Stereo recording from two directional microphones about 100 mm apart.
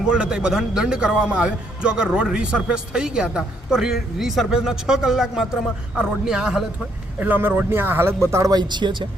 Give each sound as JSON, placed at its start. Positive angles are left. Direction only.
{"t": 0.0, "sound": "a man's voice", "side_deg": -10}
{"t": 7.2, "sound": "speech", "side_deg": -20}